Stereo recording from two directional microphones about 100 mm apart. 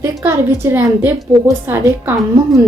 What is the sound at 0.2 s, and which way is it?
A woman's voice, 25° right (ahead or behind).